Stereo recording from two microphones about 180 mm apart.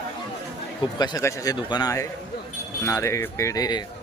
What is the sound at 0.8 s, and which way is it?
Speech, 25° left (ahead or behind).